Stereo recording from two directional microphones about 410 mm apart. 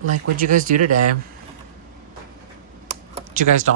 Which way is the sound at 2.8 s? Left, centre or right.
Centre.